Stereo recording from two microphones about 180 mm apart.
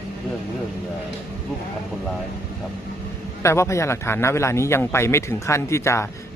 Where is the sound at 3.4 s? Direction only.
15° left (ahead or behind).